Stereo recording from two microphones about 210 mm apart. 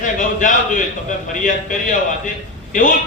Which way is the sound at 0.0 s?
40° left (ahead or behind).